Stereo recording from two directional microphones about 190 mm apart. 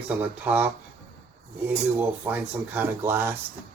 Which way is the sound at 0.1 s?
10° right (ahead or behind).